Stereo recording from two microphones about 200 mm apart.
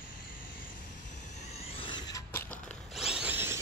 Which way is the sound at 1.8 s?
20° left (ahead or behind).